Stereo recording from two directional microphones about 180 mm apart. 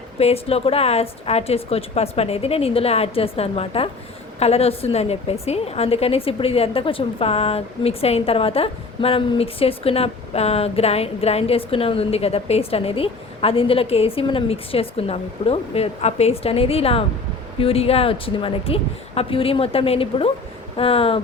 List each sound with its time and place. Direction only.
0.2 s a woman's voice: 35° left (ahead or behind)